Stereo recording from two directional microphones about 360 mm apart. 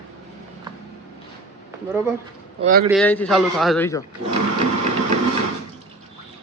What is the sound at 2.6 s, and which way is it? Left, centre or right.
Speech, right.